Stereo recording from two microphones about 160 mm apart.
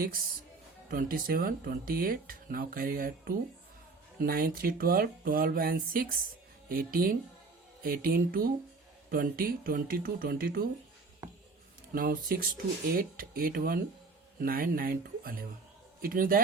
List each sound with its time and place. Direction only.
0.9 s speech: 65° right (ahead or behind)
11.9 s a man's voice: 70° right (ahead or behind)